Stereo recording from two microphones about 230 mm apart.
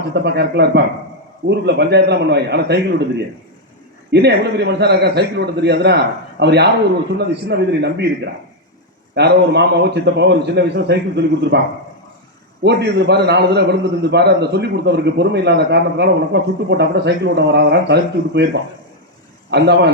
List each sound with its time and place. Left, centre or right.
0.1 s a man's voice: right
4.1 s a man's voice: right
12.6 s a man's voice: right
19.5 s a man's voice: right